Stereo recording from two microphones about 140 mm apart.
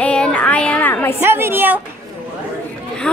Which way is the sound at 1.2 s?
15° right (ahead or behind).